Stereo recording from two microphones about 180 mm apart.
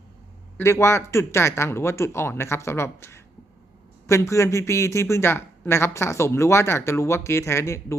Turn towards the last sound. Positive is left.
turn(degrees=15)  # may be behind; listen again after turning